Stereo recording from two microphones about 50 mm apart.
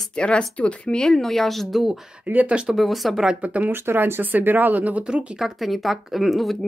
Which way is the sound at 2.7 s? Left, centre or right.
Centre.